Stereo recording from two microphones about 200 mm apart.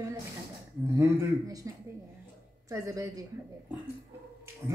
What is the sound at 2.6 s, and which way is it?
Speech, 15° right (ahead or behind).